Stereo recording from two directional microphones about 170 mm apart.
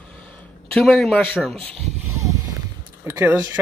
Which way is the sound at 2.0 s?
15° right (ahead or behind).